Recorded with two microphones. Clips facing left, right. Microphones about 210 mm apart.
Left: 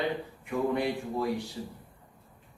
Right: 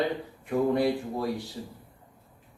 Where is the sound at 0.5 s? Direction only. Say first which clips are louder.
Right 4 dB; 40° right (ahead or behind).